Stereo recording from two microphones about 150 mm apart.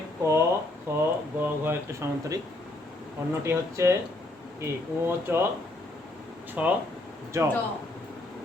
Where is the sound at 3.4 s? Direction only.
20° right (ahead or behind).